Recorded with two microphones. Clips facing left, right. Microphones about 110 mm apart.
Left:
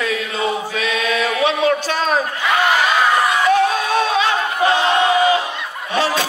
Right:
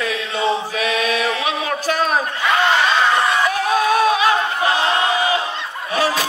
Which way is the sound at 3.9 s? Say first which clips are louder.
Right 2 dB; 25° left (ahead or behind).